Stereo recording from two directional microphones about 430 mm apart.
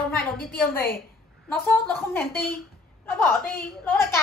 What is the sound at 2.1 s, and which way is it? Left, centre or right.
Speech, centre.